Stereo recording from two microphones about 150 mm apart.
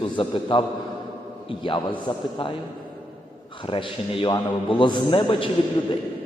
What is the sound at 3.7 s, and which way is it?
A man's voice, 35° left (ahead or behind).